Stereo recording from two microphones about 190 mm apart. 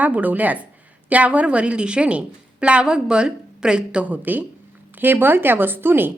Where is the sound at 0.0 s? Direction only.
10° right (ahead or behind).